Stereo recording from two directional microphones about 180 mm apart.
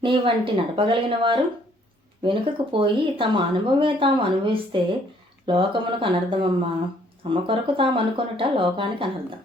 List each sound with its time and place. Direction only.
0.0 s speech: 30° right (ahead or behind)